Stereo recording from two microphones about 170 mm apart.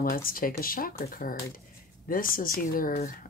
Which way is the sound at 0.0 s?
55° left (ahead or behind).